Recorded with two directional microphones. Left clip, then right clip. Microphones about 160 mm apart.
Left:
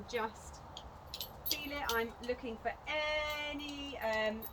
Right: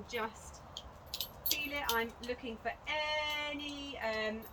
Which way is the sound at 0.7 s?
65° right (ahead or behind).